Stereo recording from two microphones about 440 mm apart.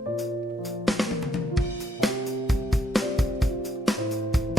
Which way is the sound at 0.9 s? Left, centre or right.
Centre.